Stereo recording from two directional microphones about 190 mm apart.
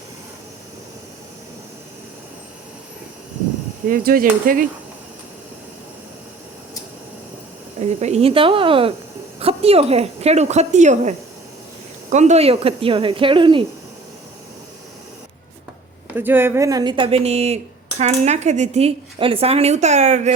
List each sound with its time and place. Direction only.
3.8 s speech: 50° right (ahead or behind)
7.8 s speech: 35° right (ahead or behind)
12.1 s speech: 35° right (ahead or behind)
16.1 s speech: 10° right (ahead or behind); by 20.3 s 35° right (ahead or behind)